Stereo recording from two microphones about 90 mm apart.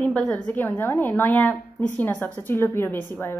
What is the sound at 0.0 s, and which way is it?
A woman's voice, 10° left (ahead or behind).